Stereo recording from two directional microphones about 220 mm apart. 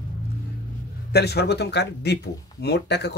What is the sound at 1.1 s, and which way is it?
Speech, 50° left (ahead or behind).